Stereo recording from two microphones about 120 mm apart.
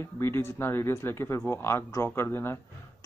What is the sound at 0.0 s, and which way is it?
Speech, 20° left (ahead or behind).